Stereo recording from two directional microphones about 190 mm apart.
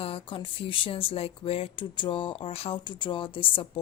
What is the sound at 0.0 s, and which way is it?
A woman's voice, 30° left (ahead or behind).